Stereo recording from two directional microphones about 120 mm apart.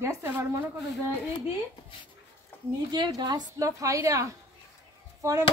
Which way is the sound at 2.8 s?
40° right (ahead or behind).